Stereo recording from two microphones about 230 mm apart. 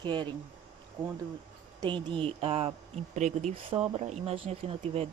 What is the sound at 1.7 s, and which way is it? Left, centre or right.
Speech, right.